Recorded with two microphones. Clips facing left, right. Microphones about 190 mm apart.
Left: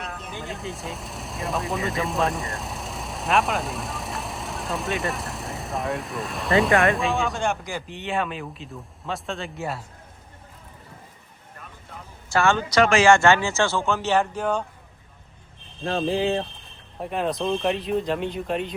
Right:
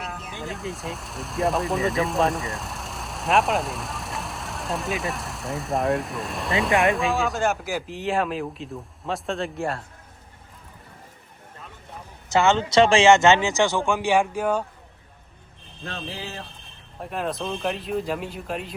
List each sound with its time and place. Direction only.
0.0 s speech: centre (ahead or behind)
12.3 s speech: 20° right (ahead or behind)
15.9 s speech: 45° left (ahead or behind)
17.0 s speech: centre (ahead or behind)